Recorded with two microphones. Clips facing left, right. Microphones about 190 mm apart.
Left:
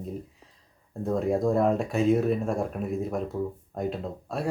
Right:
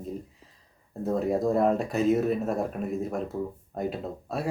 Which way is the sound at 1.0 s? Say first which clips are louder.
Left 1 dB; centre (ahead or behind).